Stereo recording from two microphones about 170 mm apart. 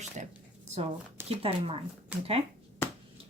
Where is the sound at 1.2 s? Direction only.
35° right (ahead or behind).